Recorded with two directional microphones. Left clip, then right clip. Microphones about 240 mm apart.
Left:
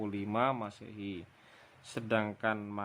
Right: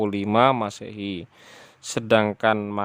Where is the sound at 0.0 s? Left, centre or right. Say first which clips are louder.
Right 14 dB; right.